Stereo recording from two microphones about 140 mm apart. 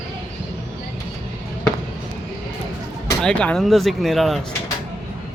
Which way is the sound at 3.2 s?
5° left (ahead or behind).